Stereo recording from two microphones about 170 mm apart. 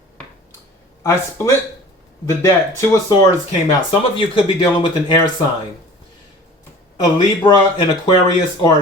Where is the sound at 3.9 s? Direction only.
30° left (ahead or behind).